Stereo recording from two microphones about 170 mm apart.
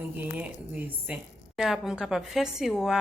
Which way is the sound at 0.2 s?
10° right (ahead or behind).